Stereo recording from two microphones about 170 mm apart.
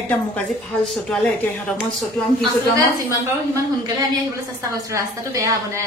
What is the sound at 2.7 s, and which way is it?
Speech, 20° right (ahead or behind).